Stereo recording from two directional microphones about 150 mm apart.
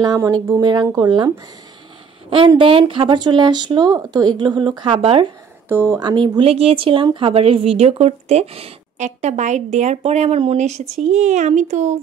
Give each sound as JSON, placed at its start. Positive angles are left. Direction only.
{"t": 0.0, "sound": "speech", "side_deg": -25}
{"t": 5.7, "sound": "speech", "side_deg": -15}
{"t": 5.9, "sound": "speech", "side_deg": -30}